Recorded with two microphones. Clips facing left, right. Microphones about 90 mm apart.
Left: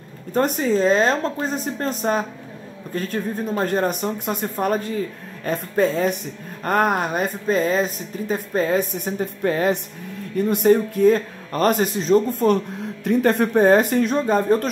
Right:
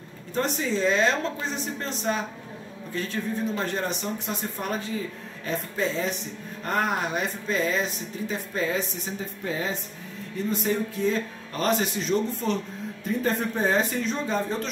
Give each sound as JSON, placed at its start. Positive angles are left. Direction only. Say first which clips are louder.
{"t": 0.3, "sound": "speech", "louder": "left 7 dB", "side_deg": 50}
{"t": 13.0, "sound": "speech", "louder": "left 8 dB", "side_deg": 70}